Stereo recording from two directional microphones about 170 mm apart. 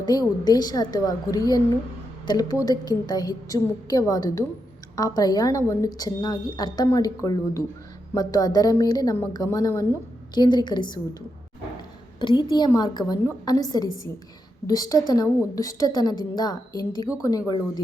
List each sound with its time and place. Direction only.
0.0 s a woman's voice: 25° left (ahead or behind)
12.2 s a woman's voice: 25° left (ahead or behind)